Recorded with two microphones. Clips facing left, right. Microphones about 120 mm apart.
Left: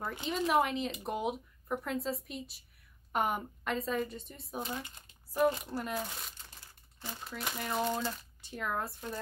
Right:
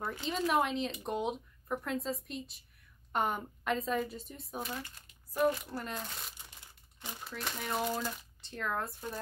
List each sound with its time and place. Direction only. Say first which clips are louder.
0.5 s speech: left 1 dB; centre (ahead or behind)
4.6 s speech: left 1 dB; 20° left (ahead or behind)
5.8 s speech: left 3 dB; 5° left (ahead or behind)
6.3 s crumpling: even; 20° right (ahead or behind)
7.2 s speech: left 1 dB; 5° left (ahead or behind)
8.4 s speech: right 1 dB; 10° left (ahead or behind)